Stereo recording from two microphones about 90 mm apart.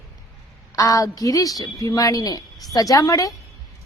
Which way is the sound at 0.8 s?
40° left (ahead or behind).